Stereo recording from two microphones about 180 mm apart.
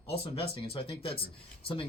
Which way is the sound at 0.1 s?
30° left (ahead or behind).